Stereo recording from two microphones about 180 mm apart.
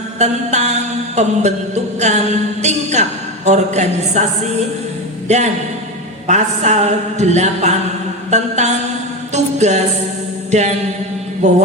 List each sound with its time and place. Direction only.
0.2 s music: 40° right (ahead or behind)
5.3 s music: 40° right (ahead or behind)